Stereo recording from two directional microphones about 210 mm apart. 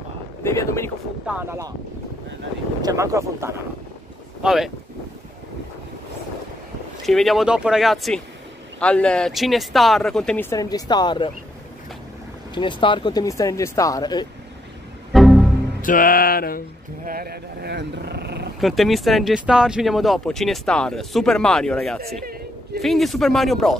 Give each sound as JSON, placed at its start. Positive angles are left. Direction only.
{"t": 0.4, "sound": "speech", "side_deg": 15}
{"t": 1.2, "sound": "speech", "side_deg": -5}
{"t": 2.8, "sound": "speech", "side_deg": -15}
{"t": 4.4, "sound": "speech", "side_deg": 0}
{"t": 7.1, "sound": "speech", "side_deg": 0}
{"t": 12.5, "sound": "speech", "side_deg": 20}
{"t": 15.1, "sound": "music", "side_deg": 0}
{"t": 15.8, "sound": "music", "side_deg": 40}
{"t": 17.0, "sound": "speech", "side_deg": -45}
{"t": 18.6, "sound": "speech", "side_deg": 0}